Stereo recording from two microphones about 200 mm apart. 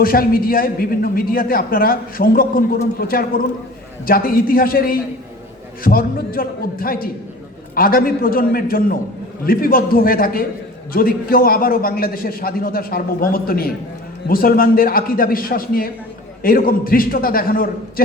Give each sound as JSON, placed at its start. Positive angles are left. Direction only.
{"t": 0.0, "sound": "a man's voice", "side_deg": 45}